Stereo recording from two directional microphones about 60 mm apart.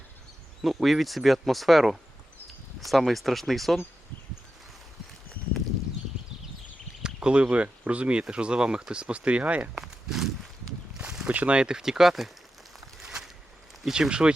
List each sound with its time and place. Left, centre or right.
0.6 s speech: centre
7.0 s speech: centre
9.7 s walk: centre
10.9 s a sound: centre
11.3 s speech: right; by 12.3 s centre
13.0 s a sound: centre
13.8 s speech: centre